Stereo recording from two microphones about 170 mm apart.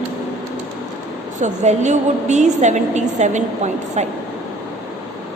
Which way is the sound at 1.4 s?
45° right (ahead or behind).